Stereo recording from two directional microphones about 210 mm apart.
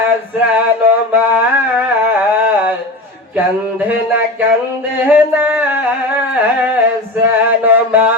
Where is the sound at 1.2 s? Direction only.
10° right (ahead or behind).